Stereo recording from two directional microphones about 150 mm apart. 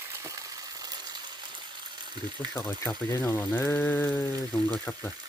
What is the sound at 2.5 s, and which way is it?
Speech, 15° left (ahead or behind).